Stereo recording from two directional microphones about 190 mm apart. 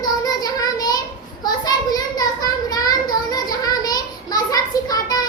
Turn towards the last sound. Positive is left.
turn(degrees=20)  # may be behind; listen again after turning